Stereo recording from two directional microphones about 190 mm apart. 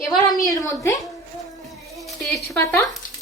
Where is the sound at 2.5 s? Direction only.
10° left (ahead or behind).